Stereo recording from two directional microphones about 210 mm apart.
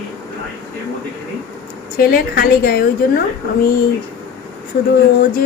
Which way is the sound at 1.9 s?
45° left (ahead or behind).